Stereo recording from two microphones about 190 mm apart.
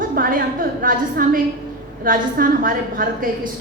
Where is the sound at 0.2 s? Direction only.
45° right (ahead or behind).